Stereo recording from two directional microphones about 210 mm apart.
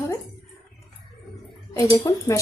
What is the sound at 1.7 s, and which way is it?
Speech, 15° left (ahead or behind).